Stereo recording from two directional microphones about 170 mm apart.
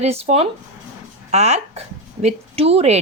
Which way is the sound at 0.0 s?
40° right (ahead or behind).